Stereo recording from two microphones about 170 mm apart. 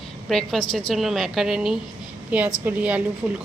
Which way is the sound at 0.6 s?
30° left (ahead or behind).